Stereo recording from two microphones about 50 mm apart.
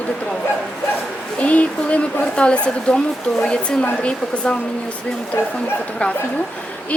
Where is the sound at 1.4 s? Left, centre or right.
Left.